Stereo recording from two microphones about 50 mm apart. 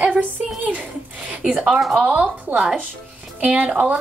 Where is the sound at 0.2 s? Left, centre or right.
Right.